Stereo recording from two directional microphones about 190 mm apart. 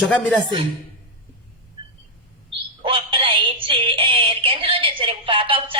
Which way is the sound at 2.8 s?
30° right (ahead or behind).